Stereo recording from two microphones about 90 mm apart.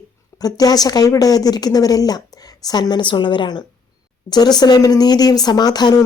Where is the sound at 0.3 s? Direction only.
45° left (ahead or behind).